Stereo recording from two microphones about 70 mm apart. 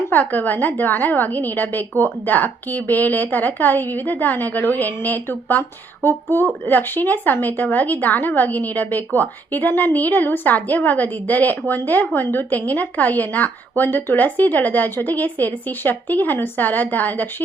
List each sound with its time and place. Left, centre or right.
0.1 s a woman's voice: left